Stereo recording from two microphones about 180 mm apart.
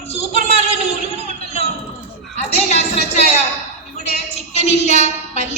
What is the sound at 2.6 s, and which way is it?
Music, 35° left (ahead or behind).